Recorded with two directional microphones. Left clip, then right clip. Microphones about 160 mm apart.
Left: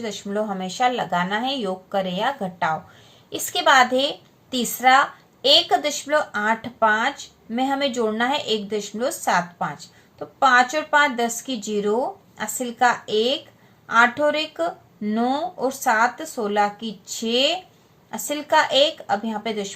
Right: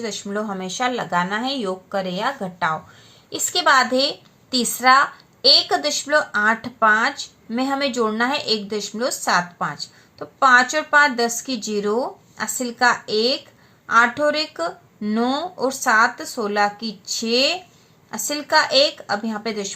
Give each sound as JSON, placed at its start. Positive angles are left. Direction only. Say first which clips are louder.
{"t": 0.3, "sound": "speech", "louder": "left 4 dB", "side_deg": -25}